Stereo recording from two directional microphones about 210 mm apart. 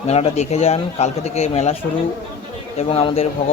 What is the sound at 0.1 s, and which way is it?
A man's voice, 30° left (ahead or behind).